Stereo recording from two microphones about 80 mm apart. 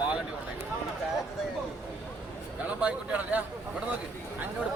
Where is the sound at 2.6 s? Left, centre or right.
Centre.